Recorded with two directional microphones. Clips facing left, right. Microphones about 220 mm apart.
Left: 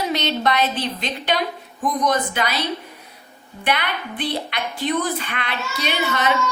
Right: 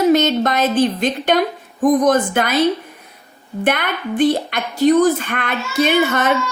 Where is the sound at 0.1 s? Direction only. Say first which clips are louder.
Right 7 dB; 50° right (ahead or behind).